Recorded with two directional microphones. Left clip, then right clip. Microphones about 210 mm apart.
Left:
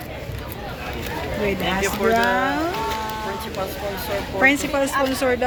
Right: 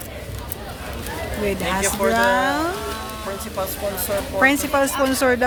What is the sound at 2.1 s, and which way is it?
Speech, 5° right (ahead or behind).